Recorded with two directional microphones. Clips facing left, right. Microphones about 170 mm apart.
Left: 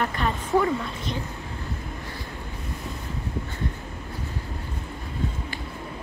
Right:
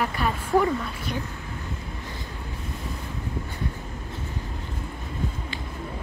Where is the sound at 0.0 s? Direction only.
10° right (ahead or behind).